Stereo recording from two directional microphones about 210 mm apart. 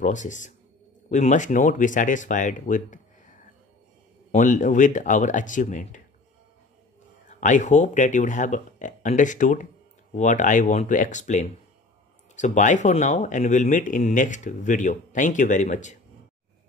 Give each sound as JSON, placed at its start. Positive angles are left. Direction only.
{"t": 0.0, "sound": "speech", "side_deg": 35}
{"t": 7.2, "sound": "speech", "side_deg": 35}